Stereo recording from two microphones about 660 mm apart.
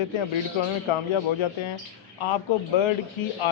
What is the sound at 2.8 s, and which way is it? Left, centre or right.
Speech, left.